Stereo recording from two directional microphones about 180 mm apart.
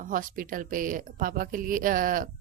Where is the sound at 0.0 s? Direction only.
50° right (ahead or behind).